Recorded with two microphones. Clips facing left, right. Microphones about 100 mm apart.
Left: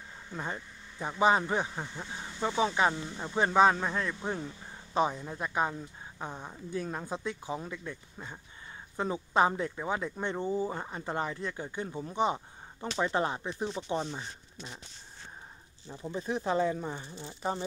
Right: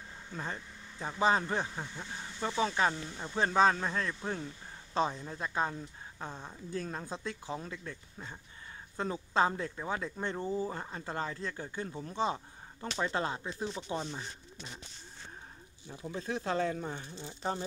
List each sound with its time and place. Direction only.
0.3 s speech: 15° left (ahead or behind)
16.2 s speech: 15° left (ahead or behind)